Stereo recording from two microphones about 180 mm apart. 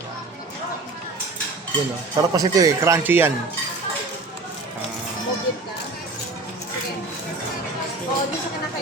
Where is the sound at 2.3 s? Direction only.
20° right (ahead or behind).